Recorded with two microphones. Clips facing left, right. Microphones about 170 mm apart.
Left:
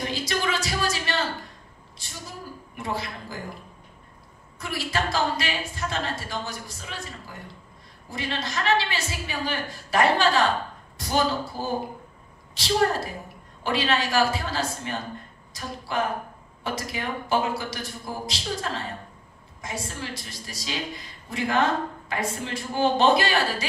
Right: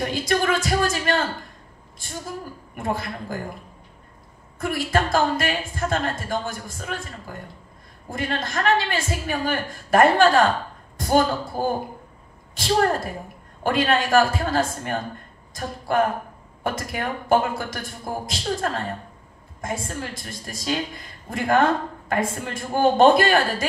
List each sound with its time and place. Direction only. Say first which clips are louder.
0.1 s a sound: right 6 dB; 50° right (ahead or behind)
2.0 s a woman's voice: right 7 dB; 50° right (ahead or behind)
4.6 s a woman's voice: right 6 dB; 50° right (ahead or behind)